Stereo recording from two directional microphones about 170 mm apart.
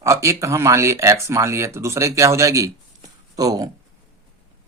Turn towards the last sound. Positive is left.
turn(degrees=-20)  # may be behind; listen again after turning